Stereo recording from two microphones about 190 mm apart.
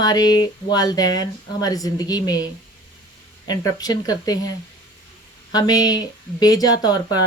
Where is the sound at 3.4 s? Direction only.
20° left (ahead or behind).